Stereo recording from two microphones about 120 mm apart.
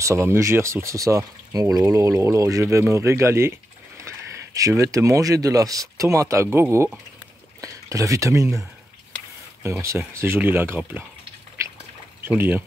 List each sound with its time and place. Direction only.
0.0 s speech: 25° right (ahead or behind)
4.6 s speech: 30° right (ahead or behind)
12.3 s speech: 15° right (ahead or behind)